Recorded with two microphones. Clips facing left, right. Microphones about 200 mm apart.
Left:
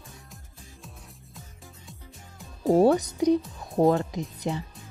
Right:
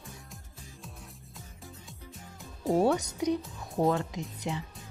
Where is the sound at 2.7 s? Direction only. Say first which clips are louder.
Left 6 dB; 35° left (ahead or behind).